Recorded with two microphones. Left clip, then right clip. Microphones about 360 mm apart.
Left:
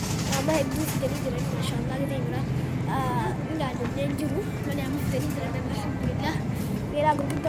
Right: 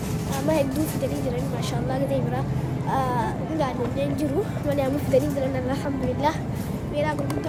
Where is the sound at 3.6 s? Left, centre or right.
Centre.